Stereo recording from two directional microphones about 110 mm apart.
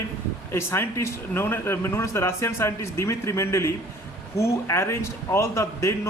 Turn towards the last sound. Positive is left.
turn(degrees=25)  # may be behind; listen again after turning